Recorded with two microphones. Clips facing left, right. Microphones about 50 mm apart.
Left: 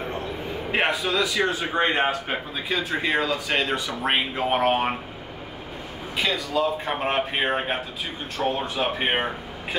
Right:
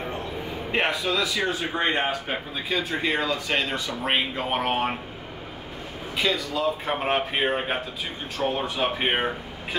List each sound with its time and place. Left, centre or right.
0.7 s a man's voice: centre
6.1 s a man's voice: centre